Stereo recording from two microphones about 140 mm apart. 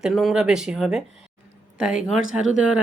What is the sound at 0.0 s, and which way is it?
Speech, centre (ahead or behind).